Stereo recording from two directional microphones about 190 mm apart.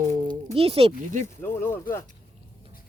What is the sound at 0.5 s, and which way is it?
Speech, 30° right (ahead or behind).